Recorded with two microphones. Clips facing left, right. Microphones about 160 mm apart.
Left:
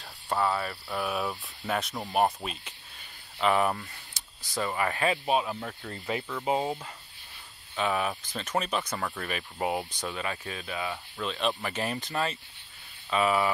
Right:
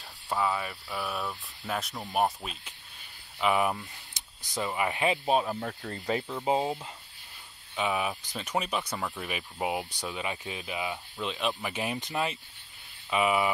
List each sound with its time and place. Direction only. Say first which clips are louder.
0.3 s speech: left 2 dB; centre (ahead or behind); by 5.3 s 20° right (ahead or behind)
5.3 s speech: right 1 dB; 35° right (ahead or behind)
7.7 s speech: left 1 dB; 10° right (ahead or behind)